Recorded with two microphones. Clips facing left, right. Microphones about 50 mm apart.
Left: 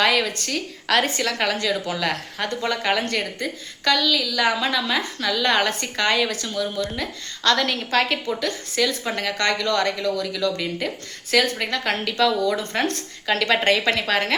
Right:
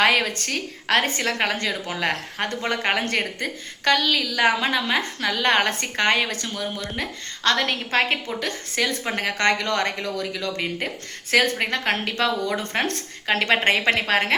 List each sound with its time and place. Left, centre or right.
0.0 s a woman's voice: right
8.4 s a woman's voice: right